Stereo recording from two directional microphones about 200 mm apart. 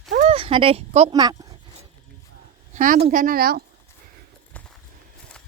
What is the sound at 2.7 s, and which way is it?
Speech, 40° right (ahead or behind).